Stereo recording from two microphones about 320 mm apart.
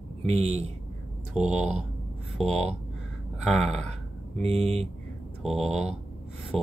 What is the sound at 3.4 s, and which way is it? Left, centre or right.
Speech, centre.